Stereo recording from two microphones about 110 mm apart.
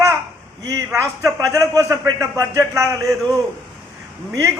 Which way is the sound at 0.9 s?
30° right (ahead or behind).